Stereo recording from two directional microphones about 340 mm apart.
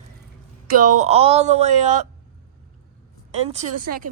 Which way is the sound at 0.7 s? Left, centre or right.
Right.